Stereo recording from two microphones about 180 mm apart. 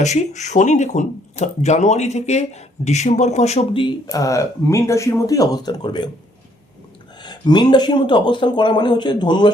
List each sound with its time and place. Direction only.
0.0 s speech: 40° left (ahead or behind); by 6.1 s 25° left (ahead or behind)
7.2 s speech: 25° left (ahead or behind)